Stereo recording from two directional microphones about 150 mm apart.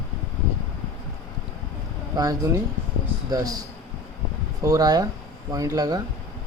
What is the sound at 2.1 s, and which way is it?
Speech, 25° right (ahead or behind).